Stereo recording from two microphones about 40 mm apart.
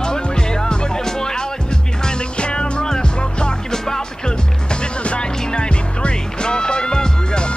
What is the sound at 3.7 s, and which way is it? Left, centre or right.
Music, centre.